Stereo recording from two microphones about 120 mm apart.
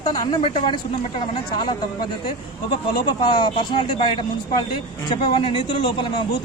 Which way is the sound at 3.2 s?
40° left (ahead or behind).